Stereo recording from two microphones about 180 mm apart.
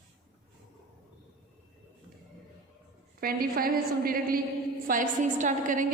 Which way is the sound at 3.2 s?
55° right (ahead or behind).